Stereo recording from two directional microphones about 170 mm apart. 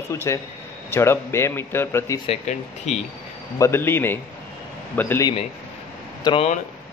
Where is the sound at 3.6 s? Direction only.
15° left (ahead or behind).